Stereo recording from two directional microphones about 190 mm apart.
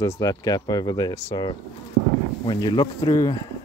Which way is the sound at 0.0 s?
20° left (ahead or behind).